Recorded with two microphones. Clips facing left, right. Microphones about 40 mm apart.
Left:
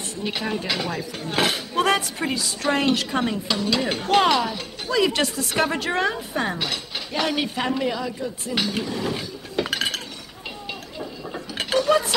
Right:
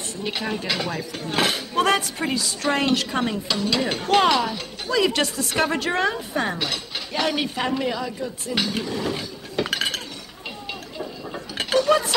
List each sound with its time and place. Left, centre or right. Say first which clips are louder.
0.2 s speech: left 1 dB; centre
3.4 s dishes: even; centre
3.8 s speech: right 1 dB; centre
11.0 s a sound: right 1 dB; centre
11.7 s mechanisms: right 1 dB; centre